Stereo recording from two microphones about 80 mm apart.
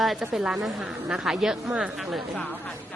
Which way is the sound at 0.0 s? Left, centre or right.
Centre.